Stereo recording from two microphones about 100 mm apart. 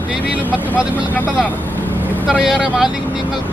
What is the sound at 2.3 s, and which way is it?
Speech, 5° right (ahead or behind).